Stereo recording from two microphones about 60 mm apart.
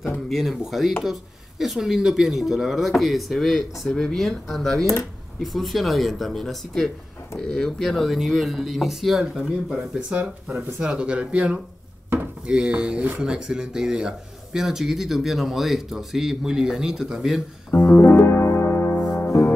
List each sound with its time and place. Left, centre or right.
0.3 s speech: centre
9.9 s speech: centre
17.8 s piano: left